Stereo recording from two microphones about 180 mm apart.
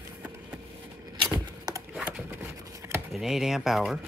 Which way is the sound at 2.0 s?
5° right (ahead or behind).